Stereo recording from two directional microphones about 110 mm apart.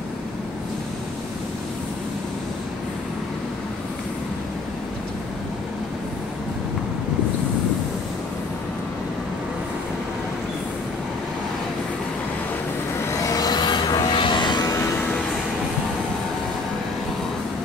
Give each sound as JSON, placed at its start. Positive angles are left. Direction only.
{"t": 13.1, "sound": "vehicle", "side_deg": 30}